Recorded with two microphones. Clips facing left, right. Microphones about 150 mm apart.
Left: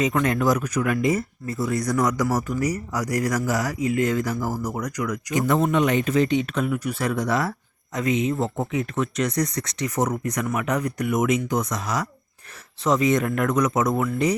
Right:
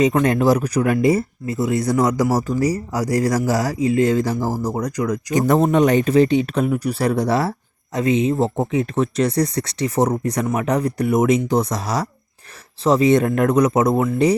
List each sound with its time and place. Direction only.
0.0 s speech: 30° right (ahead or behind)